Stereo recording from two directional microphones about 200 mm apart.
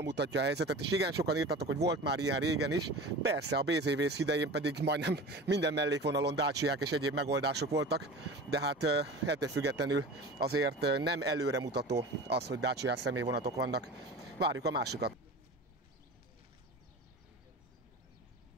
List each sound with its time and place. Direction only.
0.0 s speech: 60° right (ahead or behind)